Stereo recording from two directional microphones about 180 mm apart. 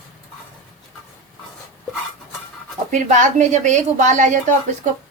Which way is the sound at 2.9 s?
45° right (ahead or behind).